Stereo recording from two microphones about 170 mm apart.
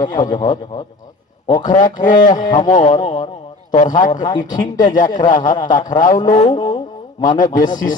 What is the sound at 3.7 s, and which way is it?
A man's voice, 50° left (ahead or behind).